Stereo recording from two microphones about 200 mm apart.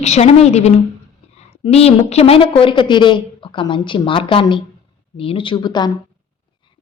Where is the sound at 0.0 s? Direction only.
35° left (ahead or behind).